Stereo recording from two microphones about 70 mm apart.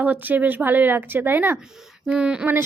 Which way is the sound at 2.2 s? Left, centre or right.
Centre.